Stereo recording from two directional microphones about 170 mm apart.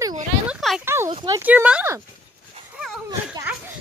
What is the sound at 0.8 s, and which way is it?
Speech, 15° right (ahead or behind).